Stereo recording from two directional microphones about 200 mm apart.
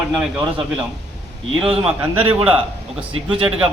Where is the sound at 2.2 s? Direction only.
30° right (ahead or behind).